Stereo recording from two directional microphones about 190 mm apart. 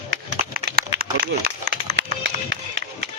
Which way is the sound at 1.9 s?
75° right (ahead or behind).